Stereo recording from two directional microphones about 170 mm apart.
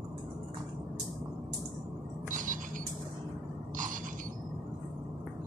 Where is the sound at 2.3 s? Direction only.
50° right (ahead or behind).